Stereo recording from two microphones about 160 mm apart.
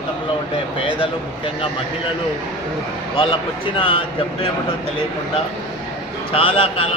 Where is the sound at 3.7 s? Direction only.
35° left (ahead or behind).